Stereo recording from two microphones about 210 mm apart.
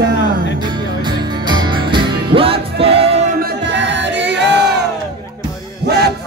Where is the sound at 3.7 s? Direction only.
60° right (ahead or behind).